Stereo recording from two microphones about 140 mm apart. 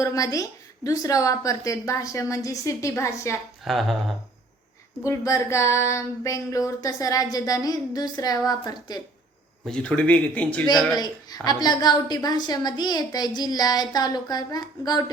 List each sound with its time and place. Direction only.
0.0 s a woman's voice: 25° left (ahead or behind)
3.6 s speech: centre (ahead or behind)
5.0 s a woman's voice: 20° left (ahead or behind)
9.6 s speech: 5° left (ahead or behind)
10.9 s a woman's voice: 30° left (ahead or behind)